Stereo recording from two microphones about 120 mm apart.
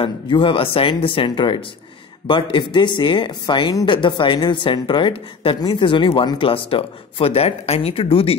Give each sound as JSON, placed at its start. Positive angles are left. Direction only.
{"t": 0.0, "sound": "speech", "side_deg": 45}